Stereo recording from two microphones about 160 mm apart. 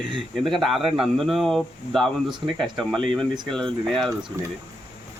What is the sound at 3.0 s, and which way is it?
Speech, 30° right (ahead or behind).